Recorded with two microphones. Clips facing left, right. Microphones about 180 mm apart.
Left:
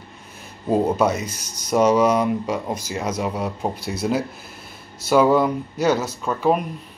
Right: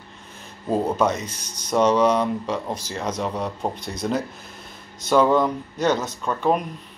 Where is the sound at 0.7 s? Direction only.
10° left (ahead or behind).